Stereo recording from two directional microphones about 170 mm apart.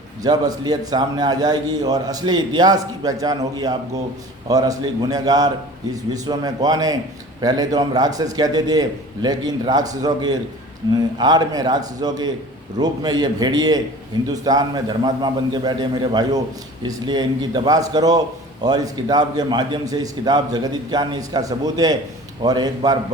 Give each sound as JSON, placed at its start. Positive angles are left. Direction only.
{"t": 0.2, "sound": "a man's voice", "side_deg": -25}